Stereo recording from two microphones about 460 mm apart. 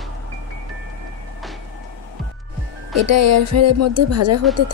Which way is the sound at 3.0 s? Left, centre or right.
Right.